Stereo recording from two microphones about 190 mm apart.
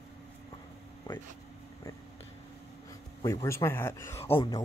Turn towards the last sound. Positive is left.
turn(degrees=20)  # may be behind; listen again after turning